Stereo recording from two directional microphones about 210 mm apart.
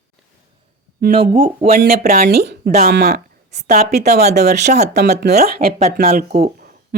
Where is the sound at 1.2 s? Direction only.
25° right (ahead or behind).